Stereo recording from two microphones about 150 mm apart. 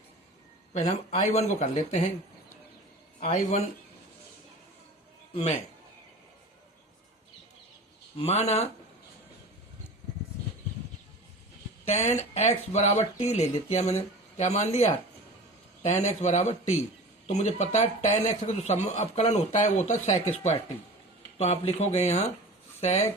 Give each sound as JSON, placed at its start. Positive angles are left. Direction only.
{"t": 0.7, "sound": "a man's voice", "side_deg": 50}
{"t": 3.2, "sound": "a man's voice", "side_deg": 45}
{"t": 5.3, "sound": "a man's voice", "side_deg": 45}
{"t": 8.2, "sound": "a man's voice", "side_deg": 45}
{"t": 11.9, "sound": "a man's voice", "side_deg": 50}